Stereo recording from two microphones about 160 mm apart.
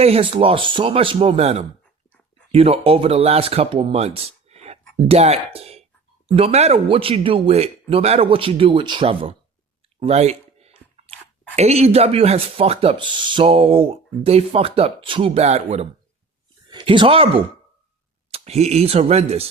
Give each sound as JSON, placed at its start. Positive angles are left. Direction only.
{"t": 0.0, "sound": "speech", "side_deg": -35}
{"t": 16.6, "sound": "speech", "side_deg": -30}